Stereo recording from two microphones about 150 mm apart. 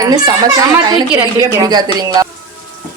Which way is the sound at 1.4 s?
25° right (ahead or behind).